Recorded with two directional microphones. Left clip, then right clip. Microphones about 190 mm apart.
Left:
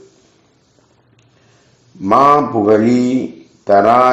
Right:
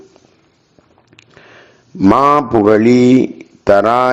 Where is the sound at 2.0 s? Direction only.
45° right (ahead or behind).